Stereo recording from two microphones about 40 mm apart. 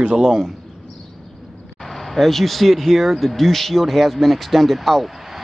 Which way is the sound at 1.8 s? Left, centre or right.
Centre.